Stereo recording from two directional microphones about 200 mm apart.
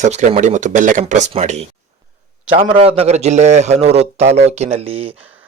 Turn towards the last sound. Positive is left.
turn(degrees=-30)  # may be behind; listen again after turning